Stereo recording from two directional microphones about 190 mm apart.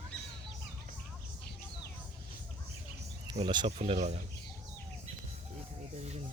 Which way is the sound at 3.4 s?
25° right (ahead or behind).